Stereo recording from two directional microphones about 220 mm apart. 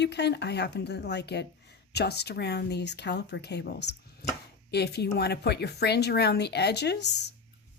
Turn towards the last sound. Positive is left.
turn(degrees=50)  # may be behind; listen again after turning